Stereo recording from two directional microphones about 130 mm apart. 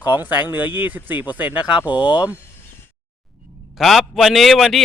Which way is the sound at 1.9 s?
35° left (ahead or behind).